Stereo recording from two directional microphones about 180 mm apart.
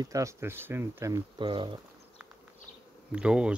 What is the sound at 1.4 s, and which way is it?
Speech, 25° right (ahead or behind).